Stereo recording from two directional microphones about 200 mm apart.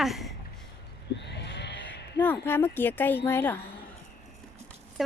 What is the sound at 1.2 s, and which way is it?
Sheep, 60° left (ahead or behind).